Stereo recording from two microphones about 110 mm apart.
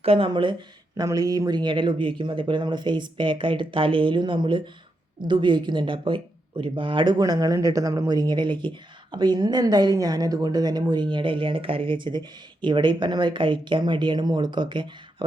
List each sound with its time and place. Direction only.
0.0 s speech: 55° right (ahead or behind)
0.9 s speech: 35° right (ahead or behind)